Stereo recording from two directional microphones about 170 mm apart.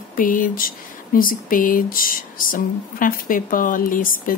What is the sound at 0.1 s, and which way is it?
A woman's voice, 55° left (ahead or behind).